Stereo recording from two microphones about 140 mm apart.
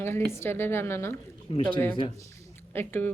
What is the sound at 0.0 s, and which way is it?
Speech, 15° left (ahead or behind).